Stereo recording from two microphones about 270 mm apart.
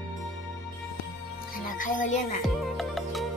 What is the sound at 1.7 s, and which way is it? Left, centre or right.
Speech, left.